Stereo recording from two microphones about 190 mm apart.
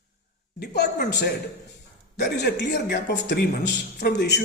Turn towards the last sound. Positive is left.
turn(degrees=60)  # may be behind; listen again after turning